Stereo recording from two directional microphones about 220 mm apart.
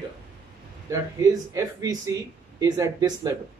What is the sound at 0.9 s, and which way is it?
Speech, 15° right (ahead or behind).